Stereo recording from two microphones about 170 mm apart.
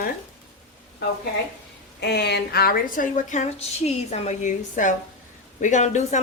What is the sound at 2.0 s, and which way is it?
A woman's voice, 80° left.